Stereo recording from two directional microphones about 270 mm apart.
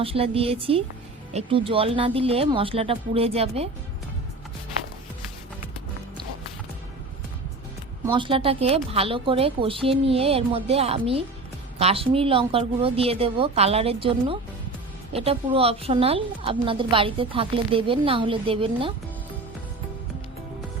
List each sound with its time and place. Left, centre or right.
0.0 s a woman's voice: right
8.0 s a woman's voice: centre